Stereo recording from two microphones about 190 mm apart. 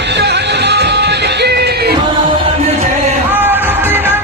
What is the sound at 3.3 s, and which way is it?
Music, 10° right (ahead or behind).